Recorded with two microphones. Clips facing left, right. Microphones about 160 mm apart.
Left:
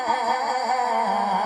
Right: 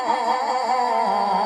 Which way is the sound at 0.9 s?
35° right (ahead or behind).